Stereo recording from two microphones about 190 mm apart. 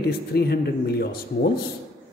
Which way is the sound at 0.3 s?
55° left (ahead or behind).